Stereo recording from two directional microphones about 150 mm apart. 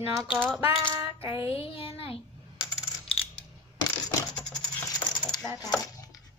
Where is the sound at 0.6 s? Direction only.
40° left (ahead or behind).